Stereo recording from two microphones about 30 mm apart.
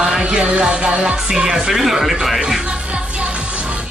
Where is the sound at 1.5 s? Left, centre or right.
Centre.